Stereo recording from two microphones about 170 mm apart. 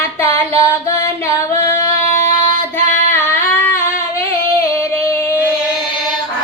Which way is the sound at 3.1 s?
10° left (ahead or behind).